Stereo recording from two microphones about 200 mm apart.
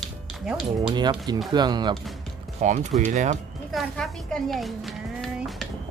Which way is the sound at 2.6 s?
35° right (ahead or behind).